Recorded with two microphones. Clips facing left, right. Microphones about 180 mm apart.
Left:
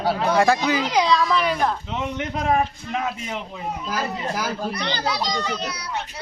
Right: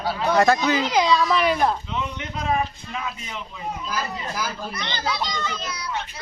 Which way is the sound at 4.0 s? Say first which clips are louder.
Left 5 dB; 45° left (ahead or behind).